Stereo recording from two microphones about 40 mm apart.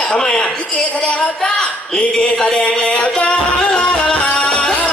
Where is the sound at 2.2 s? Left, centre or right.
Left.